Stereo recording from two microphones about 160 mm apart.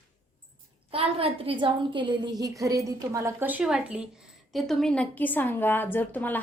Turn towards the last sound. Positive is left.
turn(degrees=10)  # may be behind; listen again after turning